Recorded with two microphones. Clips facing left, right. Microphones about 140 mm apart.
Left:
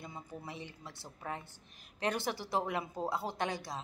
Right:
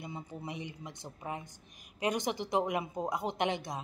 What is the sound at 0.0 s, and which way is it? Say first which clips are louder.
A woman's voice: right 3 dB; 20° right (ahead or behind).